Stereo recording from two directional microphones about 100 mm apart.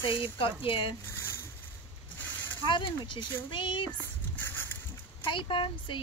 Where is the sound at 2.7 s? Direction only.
55° left (ahead or behind).